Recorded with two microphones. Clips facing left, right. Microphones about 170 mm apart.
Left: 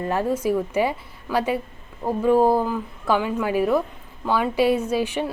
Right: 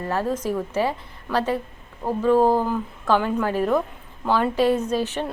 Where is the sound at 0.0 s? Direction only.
15° left (ahead or behind).